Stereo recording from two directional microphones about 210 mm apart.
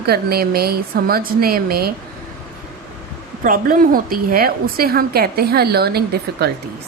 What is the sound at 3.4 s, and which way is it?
Speech, 40° right (ahead or behind).